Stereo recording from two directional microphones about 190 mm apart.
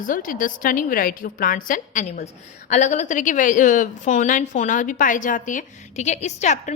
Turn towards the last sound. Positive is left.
turn(degrees=40)  # may be behind; listen again after turning